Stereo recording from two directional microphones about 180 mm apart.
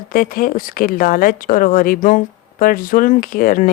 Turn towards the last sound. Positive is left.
turn(degrees=50)  # may be behind; listen again after turning